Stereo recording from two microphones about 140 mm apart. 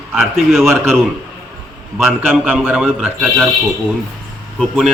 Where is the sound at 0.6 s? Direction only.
20° right (ahead or behind).